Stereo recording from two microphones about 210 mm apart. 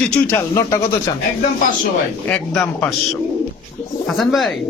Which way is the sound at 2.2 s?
5° left (ahead or behind).